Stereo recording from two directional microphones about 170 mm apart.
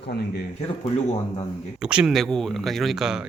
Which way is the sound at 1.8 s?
5° right (ahead or behind).